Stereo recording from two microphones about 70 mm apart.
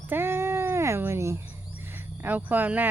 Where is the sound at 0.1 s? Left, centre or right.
Right.